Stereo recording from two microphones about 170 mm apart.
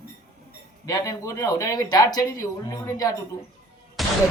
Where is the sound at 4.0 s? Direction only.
Centre (ahead or behind).